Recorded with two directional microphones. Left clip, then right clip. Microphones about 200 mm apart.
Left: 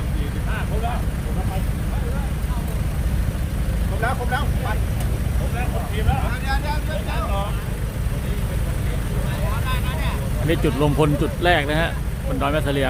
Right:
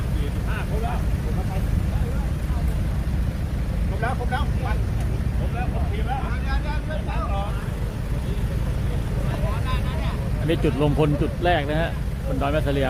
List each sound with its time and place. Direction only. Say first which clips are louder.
4.0 s speech: left 3 dB; 15° left (ahead or behind)
10.4 s speech: left 2 dB; 5° left (ahead or behind)